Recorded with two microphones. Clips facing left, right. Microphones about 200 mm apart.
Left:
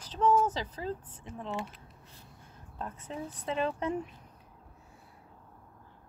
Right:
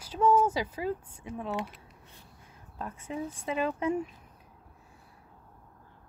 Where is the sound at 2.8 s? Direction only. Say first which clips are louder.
Right 3 dB; 10° right (ahead or behind).